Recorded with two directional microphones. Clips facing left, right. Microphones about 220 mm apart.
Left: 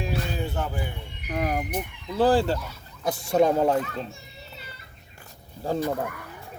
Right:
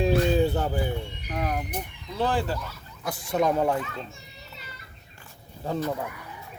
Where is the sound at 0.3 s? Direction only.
35° right (ahead or behind).